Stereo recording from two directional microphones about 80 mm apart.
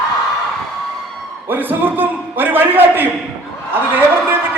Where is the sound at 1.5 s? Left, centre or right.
Right.